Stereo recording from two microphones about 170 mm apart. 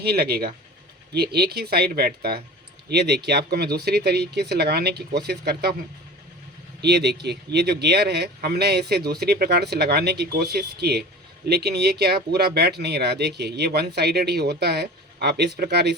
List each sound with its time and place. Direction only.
0.0 s speech: 70° right (ahead or behind)
6.8 s speech: 80° right